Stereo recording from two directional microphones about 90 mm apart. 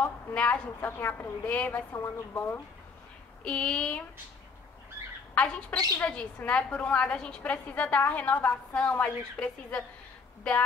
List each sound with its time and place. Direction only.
0.0 s a woman's voice: 15° left (ahead or behind)
3.4 s a woman's voice: 10° left (ahead or behind)
5.3 s a woman's voice: 15° left (ahead or behind)